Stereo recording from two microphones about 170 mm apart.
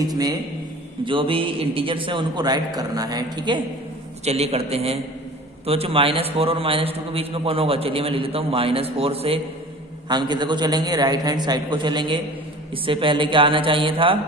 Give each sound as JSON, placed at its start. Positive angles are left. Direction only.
{"t": 1.0, "sound": "a man's voice", "side_deg": -30}
{"t": 4.2, "sound": "a man's voice", "side_deg": -40}